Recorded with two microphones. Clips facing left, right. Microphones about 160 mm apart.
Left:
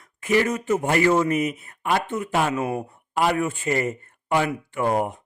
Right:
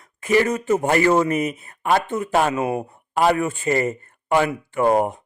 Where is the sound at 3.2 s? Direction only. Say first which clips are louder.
Right 3 dB; 40° right (ahead or behind).